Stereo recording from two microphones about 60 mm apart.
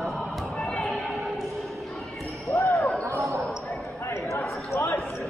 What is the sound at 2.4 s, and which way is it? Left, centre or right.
Basketball bounce, left.